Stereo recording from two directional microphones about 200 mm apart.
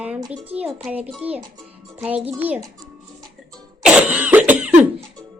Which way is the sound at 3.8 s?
5° right (ahead or behind).